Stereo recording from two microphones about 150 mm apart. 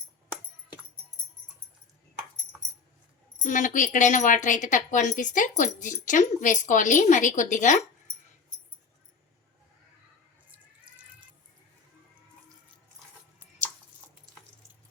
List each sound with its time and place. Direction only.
3.4 s speech: 55° left (ahead or behind)